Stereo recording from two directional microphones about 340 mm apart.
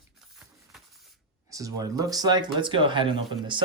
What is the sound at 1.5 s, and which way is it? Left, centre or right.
Speech, centre.